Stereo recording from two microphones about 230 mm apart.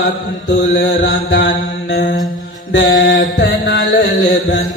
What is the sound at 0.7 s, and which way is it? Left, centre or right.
Mantra, left.